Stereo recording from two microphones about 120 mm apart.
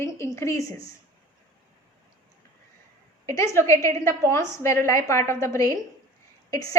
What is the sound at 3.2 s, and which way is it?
A woman's voice, 25° left (ahead or behind).